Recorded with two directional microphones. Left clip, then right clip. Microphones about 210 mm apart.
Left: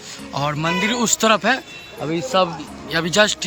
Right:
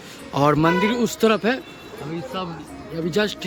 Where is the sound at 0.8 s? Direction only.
5° right (ahead or behind).